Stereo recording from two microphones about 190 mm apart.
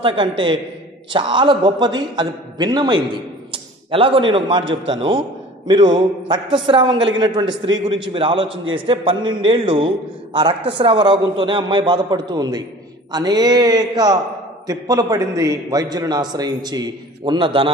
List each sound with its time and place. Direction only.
0.0 s a man's voice: 25° right (ahead or behind)
6.2 s a man's voice: 25° right (ahead or behind)